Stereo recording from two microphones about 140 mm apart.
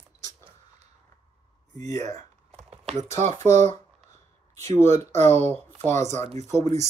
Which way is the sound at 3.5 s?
55° right (ahead or behind).